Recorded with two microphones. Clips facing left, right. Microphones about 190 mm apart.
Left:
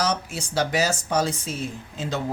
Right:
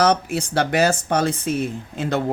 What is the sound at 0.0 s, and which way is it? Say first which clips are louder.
Speech: right 7 dB; 60° right (ahead or behind).